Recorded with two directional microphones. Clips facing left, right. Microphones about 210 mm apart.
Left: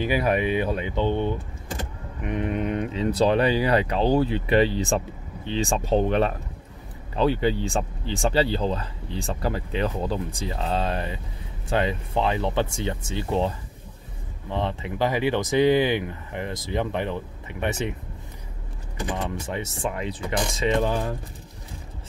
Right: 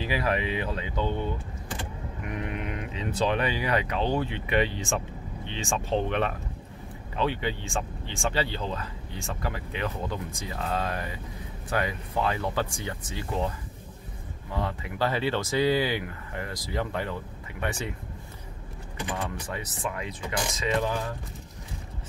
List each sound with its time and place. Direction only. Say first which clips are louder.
0.1 s speech: left 4 dB; 25° left (ahead or behind)
19.1 s speech: left 4 dB; 20° left (ahead or behind)